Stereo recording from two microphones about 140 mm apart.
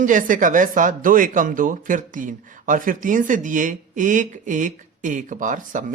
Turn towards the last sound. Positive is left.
turn(degrees=-65)  # may be behind; listen again after turning